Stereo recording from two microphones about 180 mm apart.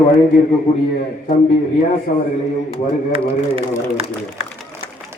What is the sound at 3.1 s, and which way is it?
Speech, 30° right (ahead or behind).